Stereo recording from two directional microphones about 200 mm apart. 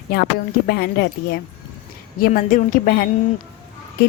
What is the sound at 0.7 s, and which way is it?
Speech, 50° left (ahead or behind).